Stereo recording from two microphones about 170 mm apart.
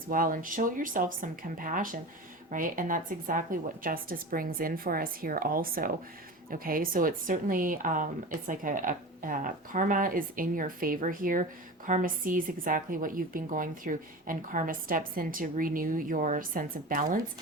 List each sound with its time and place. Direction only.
0.1 s a woman's voice: 55° right (ahead or behind)